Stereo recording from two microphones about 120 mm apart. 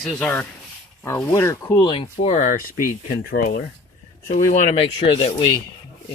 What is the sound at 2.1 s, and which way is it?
Speech, 75° left (ahead or behind).